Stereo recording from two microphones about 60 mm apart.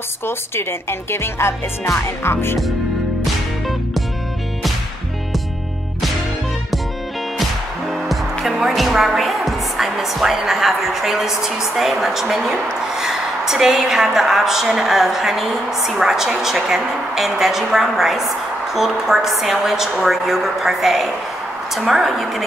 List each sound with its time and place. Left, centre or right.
0.3 s a woman's voice: left
8.5 s a woman's voice: centre